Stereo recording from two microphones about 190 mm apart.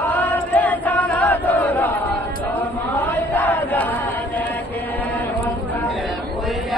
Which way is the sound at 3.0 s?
10° left (ahead or behind).